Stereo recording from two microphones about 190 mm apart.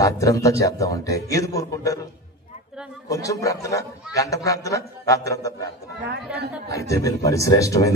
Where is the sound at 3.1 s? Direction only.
15° left (ahead or behind).